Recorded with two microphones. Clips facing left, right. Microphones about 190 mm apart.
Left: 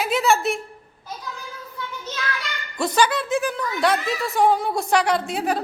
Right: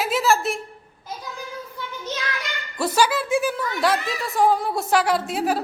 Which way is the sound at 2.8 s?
5° right (ahead or behind).